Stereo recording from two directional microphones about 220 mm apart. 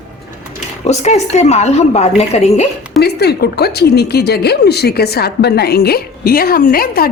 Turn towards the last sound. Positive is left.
turn(degrees=40)  # may be behind; listen again after turning